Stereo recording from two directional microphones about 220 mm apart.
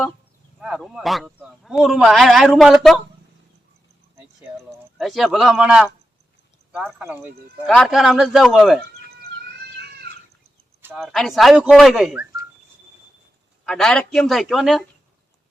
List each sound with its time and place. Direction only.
0.6 s a man's voice: centre (ahead or behind)
4.9 s a man's voice: centre (ahead or behind)
9.7 s cat: 45° right (ahead or behind)
10.8 s a man's voice: centre (ahead or behind)
13.7 s a man's voice: 5° left (ahead or behind)